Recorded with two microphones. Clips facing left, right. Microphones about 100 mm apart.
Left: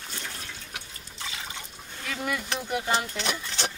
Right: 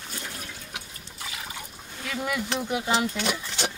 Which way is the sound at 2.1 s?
10° right (ahead or behind).